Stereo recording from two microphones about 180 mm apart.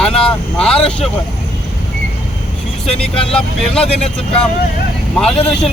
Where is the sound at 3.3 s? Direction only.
5° left (ahead or behind).